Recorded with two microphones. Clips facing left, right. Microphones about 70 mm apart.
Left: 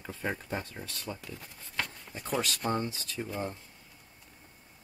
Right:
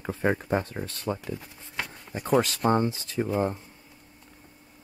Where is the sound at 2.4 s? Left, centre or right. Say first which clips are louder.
Right 8 dB; right.